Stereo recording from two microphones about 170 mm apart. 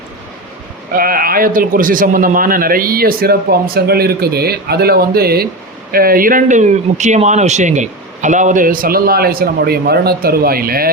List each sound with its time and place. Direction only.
0.9 s speech: 60° right (ahead or behind)